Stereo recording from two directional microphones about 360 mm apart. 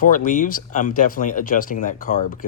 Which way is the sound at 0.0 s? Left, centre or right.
Left.